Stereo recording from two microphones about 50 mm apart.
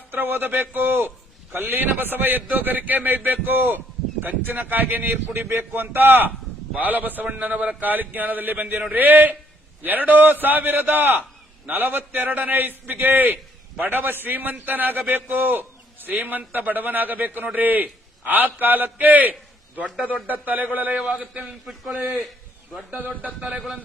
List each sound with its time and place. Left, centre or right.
0.1 s a man's voice: right
21.1 s a man's voice: right
21.4 s a man's voice: centre
22.9 s a man's voice: right